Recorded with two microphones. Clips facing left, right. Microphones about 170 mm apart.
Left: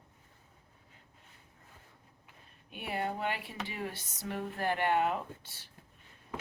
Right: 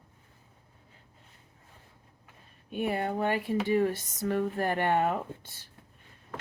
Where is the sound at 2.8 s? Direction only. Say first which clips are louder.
Right 6 dB; 45° right (ahead or behind).